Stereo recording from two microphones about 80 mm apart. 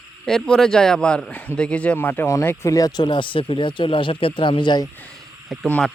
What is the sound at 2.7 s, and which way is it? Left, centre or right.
Speech, left.